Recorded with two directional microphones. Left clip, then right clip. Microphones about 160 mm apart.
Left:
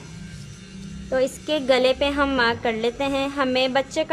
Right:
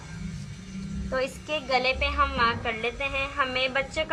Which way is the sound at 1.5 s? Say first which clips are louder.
Left 6 dB; 55° left (ahead or behind).